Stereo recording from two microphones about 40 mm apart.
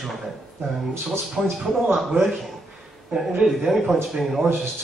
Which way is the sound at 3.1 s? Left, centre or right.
Centre.